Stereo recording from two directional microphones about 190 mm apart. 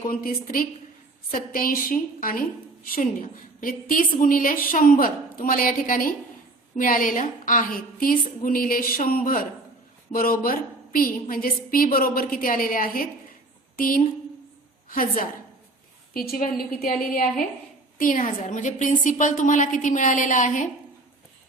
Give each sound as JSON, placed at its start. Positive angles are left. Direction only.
{"t": 0.0, "sound": "a woman's voice", "side_deg": 50}
{"t": 17.9, "sound": "a woman's voice", "side_deg": 45}